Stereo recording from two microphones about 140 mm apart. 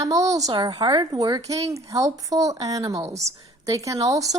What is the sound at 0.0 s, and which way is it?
A child's voice, 25° right (ahead or behind).